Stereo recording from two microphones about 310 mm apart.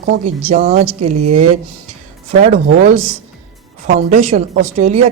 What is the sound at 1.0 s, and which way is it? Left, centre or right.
Speech, right.